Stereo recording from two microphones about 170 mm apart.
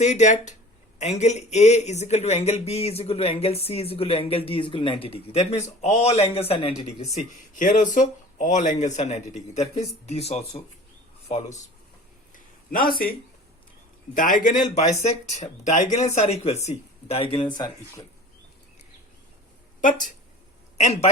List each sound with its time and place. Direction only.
0.0 s a man's voice: 45° left (ahead or behind)
12.3 s a sound: 55° left (ahead or behind)
14.1 s a man's voice: 50° left (ahead or behind); by 18.0 s 25° left (ahead or behind)
19.8 s a man's voice: 50° left (ahead or behind)
20.7 s speech: 40° left (ahead or behind)